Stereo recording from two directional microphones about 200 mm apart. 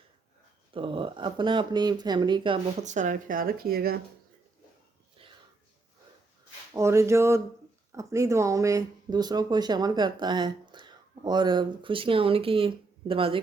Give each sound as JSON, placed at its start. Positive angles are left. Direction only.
{"t": 0.7, "sound": "speech", "side_deg": -25}
{"t": 2.8, "sound": "speech", "side_deg": -40}
{"t": 5.2, "sound": "a sound", "side_deg": -25}
{"t": 6.7, "sound": "speech", "side_deg": -15}